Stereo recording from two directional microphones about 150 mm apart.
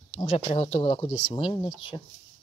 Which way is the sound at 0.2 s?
40° left (ahead or behind).